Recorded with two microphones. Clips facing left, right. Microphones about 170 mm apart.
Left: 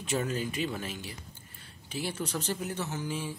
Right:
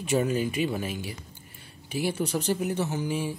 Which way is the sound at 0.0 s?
10° right (ahead or behind).